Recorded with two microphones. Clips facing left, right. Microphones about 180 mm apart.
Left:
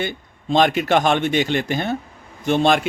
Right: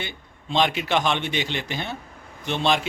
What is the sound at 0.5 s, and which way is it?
A man's voice, 50° left (ahead or behind).